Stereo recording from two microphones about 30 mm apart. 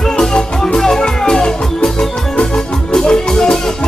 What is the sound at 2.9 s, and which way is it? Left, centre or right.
Music, centre.